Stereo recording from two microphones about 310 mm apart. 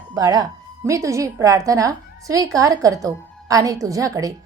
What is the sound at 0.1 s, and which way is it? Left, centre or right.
A woman's voice, centre.